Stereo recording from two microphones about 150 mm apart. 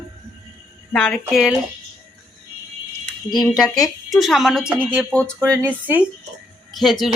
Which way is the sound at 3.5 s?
25° left (ahead or behind).